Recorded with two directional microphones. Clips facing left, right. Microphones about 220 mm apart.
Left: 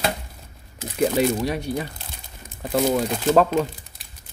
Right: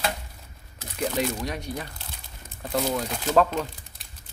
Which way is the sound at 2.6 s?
10° left (ahead or behind).